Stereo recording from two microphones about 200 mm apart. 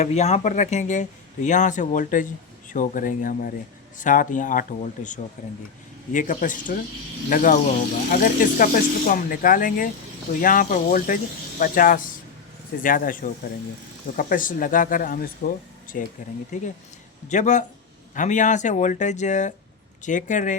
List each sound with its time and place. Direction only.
0.0 s speech: 35° left (ahead or behind)